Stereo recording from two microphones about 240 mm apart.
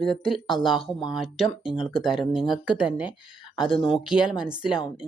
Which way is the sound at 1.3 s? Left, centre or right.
Centre.